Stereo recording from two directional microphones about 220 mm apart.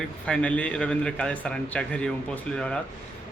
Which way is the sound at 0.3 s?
5° left (ahead or behind).